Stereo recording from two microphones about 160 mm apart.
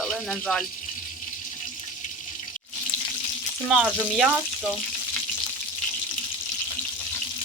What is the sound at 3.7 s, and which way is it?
Speech, 5° right (ahead or behind).